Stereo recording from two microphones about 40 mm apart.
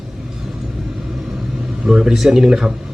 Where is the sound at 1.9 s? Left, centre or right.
Centre.